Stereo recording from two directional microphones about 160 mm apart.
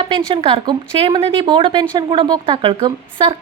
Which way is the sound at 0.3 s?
30° right (ahead or behind).